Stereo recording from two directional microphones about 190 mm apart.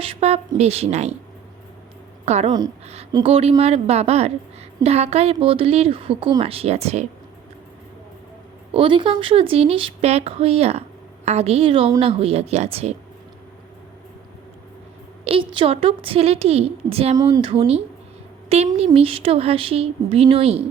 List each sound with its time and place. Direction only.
0.0 s speech: 30° right (ahead or behind)
2.2 s a woman's voice: 35° right (ahead or behind)
8.7 s speech: 25° right (ahead or behind)
15.2 s a woman's voice: 30° right (ahead or behind)